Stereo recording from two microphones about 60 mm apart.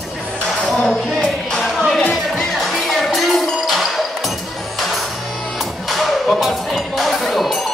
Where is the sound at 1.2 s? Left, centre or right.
Centre.